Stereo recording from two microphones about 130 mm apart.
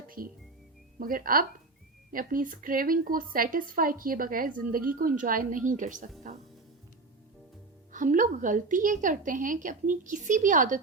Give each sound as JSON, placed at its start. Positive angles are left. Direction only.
{"t": 0.2, "sound": "speech", "side_deg": -90}
{"t": 7.9, "sound": "a woman's voice", "side_deg": -85}